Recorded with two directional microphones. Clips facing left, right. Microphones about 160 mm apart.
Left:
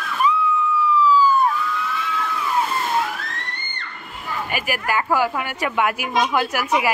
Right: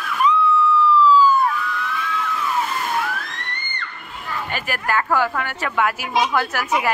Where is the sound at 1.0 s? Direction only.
10° left (ahead or behind).